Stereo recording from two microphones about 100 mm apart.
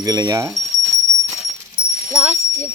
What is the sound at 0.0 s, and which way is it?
Speech, 40° right (ahead or behind).